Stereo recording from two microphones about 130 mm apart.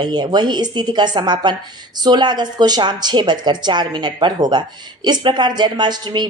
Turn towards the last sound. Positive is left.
turn(degrees=-35)  # may be behind; listen again after turning